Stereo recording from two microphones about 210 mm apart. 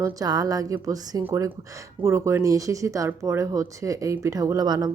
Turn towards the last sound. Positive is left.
turn(degrees=-20)  # may be behind; listen again after turning